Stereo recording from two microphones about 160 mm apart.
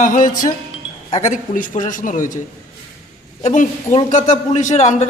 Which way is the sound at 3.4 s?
50° left (ahead or behind).